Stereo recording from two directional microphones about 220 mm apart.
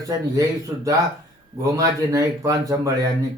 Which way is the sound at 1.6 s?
15° right (ahead or behind).